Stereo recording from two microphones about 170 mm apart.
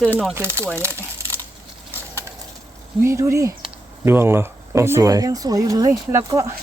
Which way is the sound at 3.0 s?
15° right (ahead or behind).